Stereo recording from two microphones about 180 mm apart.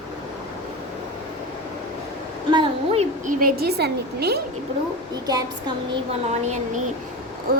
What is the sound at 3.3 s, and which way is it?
A woman's voice, 55° right (ahead or behind).